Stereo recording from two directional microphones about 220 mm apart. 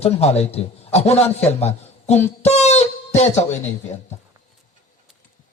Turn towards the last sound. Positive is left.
turn(degrees=30)  # may be behind; listen again after turning